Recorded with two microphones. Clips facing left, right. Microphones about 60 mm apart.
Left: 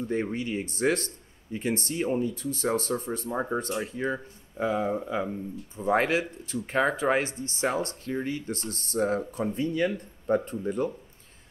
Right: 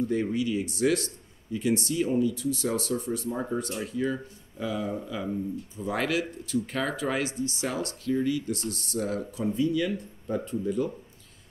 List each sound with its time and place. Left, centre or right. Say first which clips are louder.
0.0 s speech: right 2 dB; left